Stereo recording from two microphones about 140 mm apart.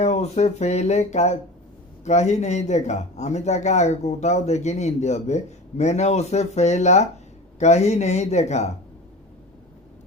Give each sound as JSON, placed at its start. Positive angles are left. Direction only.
{"t": 0.0, "sound": "speech", "side_deg": 55}